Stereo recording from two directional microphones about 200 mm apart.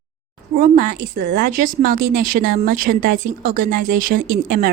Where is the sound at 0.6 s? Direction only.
40° right (ahead or behind).